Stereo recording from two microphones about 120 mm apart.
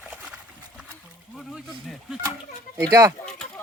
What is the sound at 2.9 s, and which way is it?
Speech, 25° right (ahead or behind).